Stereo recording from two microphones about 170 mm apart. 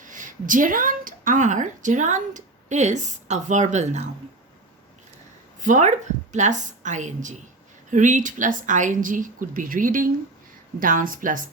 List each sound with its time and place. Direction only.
0.0 s a woman's voice: 50° right (ahead or behind)
5.5 s a woman's voice: 45° right (ahead or behind)